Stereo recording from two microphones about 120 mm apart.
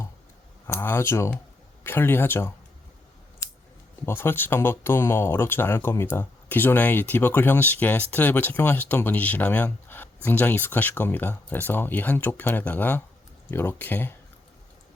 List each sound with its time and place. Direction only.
0.7 s speech: 20° left (ahead or behind)
4.0 s speech: 20° left (ahead or behind)